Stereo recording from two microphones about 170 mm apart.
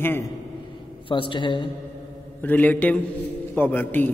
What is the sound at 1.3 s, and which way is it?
Speech, 25° left (ahead or behind).